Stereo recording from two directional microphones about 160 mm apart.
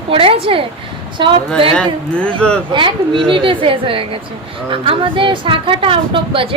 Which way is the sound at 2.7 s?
30° right (ahead or behind).